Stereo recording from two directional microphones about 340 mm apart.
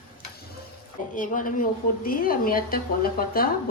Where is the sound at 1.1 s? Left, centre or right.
Left.